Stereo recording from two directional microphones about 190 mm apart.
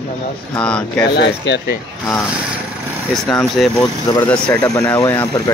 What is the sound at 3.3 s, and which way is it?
Speech, centre (ahead or behind).